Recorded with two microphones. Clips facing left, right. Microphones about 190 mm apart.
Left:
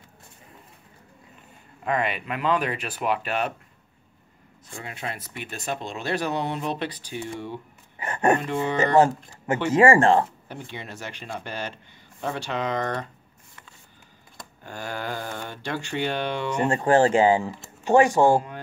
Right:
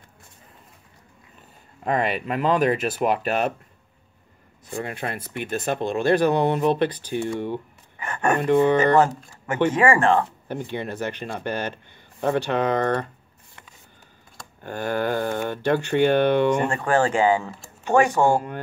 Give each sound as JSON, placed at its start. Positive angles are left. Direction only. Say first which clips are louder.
{"t": 1.9, "sound": "speech", "louder": "right 3 dB", "side_deg": -40}
{"t": 4.7, "sound": "speech", "louder": "right 6 dB", "side_deg": -55}
{"t": 8.0, "sound": "a sound", "louder": "left 2 dB", "side_deg": 30}
{"t": 8.4, "sound": "speech", "louder": "right 7 dB", "side_deg": -55}
{"t": 9.8, "sound": "speech", "louder": "left 3 dB", "side_deg": 30}
{"t": 10.5, "sound": "speech", "louder": "right 8 dB", "side_deg": -55}
{"t": 14.6, "sound": "speech", "louder": "right 8 dB", "side_deg": -55}
{"t": 16.6, "sound": "speech", "louder": "left 2 dB", "side_deg": 25}